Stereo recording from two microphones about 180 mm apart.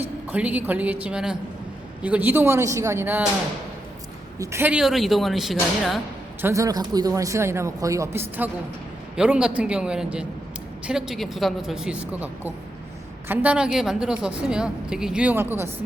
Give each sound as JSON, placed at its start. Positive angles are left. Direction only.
{"t": 0.3, "sound": "speech", "side_deg": -10}
{"t": 4.4, "sound": "speech", "side_deg": -10}
{"t": 6.4, "sound": "speech", "side_deg": -15}